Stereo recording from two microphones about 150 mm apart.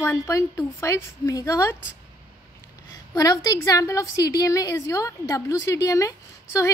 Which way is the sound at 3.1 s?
25° left (ahead or behind).